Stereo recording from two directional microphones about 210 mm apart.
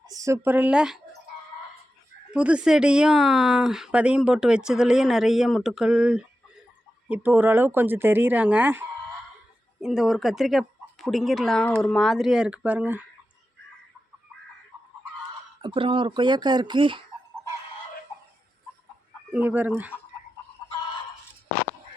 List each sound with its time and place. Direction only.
0.1 s speech: 15° right (ahead or behind)
2.3 s a woman's voice: 5° right (ahead or behind)
15.6 s speech: 25° right (ahead or behind)
19.3 s speech: 10° right (ahead or behind)